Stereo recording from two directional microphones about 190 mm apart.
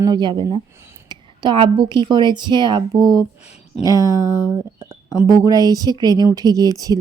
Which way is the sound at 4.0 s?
20° left (ahead or behind).